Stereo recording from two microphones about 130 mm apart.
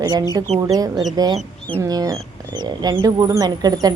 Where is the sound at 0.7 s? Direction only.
30° right (ahead or behind).